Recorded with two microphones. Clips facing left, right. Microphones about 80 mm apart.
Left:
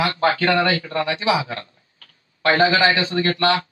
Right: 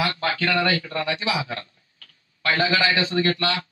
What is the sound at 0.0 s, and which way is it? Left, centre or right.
A man's voice, left.